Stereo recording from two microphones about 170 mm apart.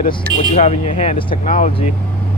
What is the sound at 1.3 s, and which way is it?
Speech, 50° left (ahead or behind).